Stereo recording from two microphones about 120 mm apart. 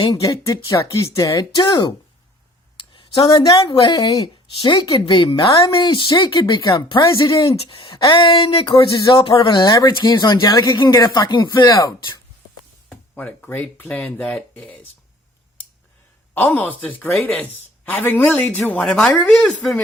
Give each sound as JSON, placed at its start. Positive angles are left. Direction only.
{"t": 0.0, "sound": "a woman's voice", "side_deg": 30}
{"t": 2.9, "sound": "a woman's voice", "side_deg": 35}
{"t": 7.3, "sound": "a woman's voice", "side_deg": 45}
{"t": 12.9, "sound": "speech", "side_deg": 10}
{"t": 16.3, "sound": "a man's voice", "side_deg": 15}